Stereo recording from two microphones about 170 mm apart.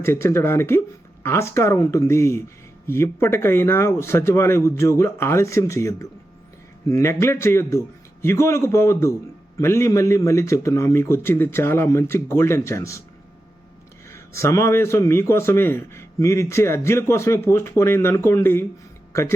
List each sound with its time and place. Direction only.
0.0 s a man's voice: 15° left (ahead or behind)
14.1 s a man's voice: 15° left (ahead or behind)